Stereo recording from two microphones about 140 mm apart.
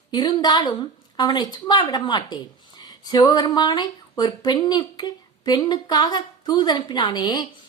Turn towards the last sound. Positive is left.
turn(degrees=30)  # may be behind; listen again after turning